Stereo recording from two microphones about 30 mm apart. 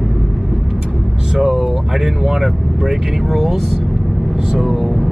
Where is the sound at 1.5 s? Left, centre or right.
Centre.